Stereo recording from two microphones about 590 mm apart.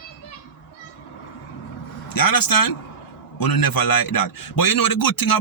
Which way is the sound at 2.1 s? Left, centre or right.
Left.